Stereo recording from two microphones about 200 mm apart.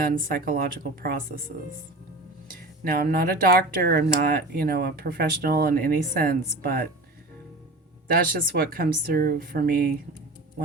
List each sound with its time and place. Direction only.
0.0 s speech: 45° right (ahead or behind)
2.8 s speech: 50° right (ahead or behind)
8.0 s speech: 45° right (ahead or behind)